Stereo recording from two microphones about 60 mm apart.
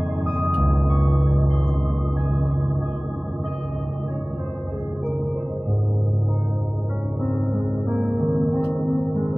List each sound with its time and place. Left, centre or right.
0.2 s music: centre
7.9 s music: centre